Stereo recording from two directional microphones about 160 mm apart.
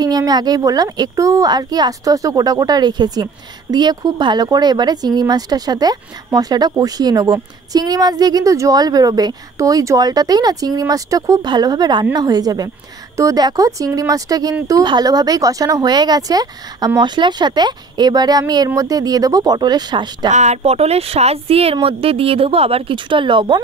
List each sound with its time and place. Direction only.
0.0 s speech: 25° right (ahead or behind)
20.2 s speech: 45° right (ahead or behind); by 23.6 s 30° right (ahead or behind)